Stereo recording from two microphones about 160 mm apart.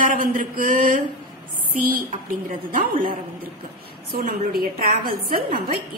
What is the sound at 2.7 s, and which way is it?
A woman's voice, 60° right (ahead or behind).